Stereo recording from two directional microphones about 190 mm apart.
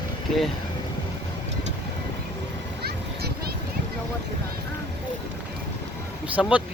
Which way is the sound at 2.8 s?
55° right (ahead or behind).